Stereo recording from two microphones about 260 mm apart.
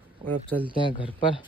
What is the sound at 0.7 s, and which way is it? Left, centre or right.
Speech, centre.